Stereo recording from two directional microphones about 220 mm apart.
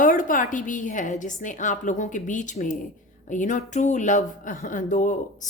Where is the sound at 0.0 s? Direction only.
35° left (ahead or behind).